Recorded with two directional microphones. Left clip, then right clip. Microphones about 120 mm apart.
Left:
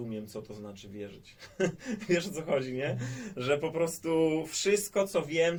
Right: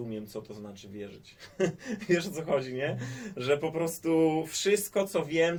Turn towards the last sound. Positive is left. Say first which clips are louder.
# right 1 dB
turn(degrees=-30)  # may be behind; listen again after turning